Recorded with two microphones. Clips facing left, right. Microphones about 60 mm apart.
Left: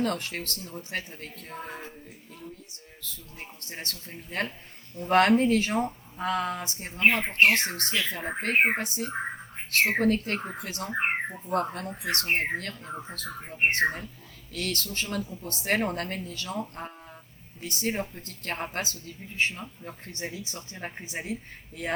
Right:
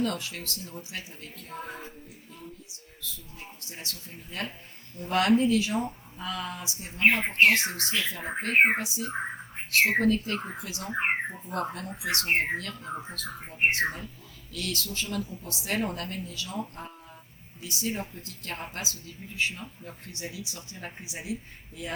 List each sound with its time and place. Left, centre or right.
0.0 s speech: left
3.0 s speech: left